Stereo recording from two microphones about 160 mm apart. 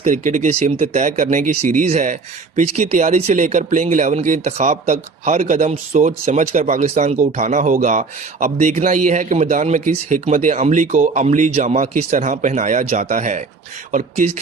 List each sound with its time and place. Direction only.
0.0 s speech: 50° right (ahead or behind)